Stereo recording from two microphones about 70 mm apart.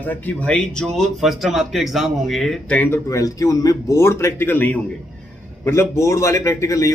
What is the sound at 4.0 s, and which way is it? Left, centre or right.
Speech, left.